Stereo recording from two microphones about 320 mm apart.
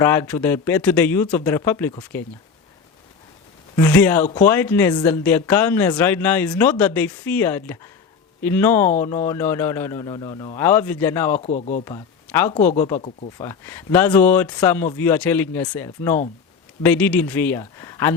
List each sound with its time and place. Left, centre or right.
0.0 s speech: centre
3.8 s speech: centre
11.3 s speech: left
11.9 s speech: centre